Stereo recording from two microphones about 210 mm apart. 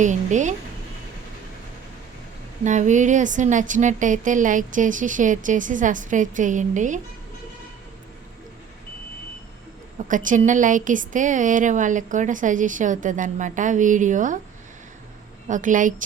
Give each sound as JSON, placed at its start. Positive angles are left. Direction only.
{"t": 0.0, "sound": "speech", "side_deg": -35}
{"t": 2.6, "sound": "speech", "side_deg": -35}
{"t": 10.1, "sound": "speech", "side_deg": -40}
{"t": 15.4, "sound": "speech", "side_deg": -40}